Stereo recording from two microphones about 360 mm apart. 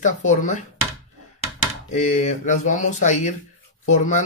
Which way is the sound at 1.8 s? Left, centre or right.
Left.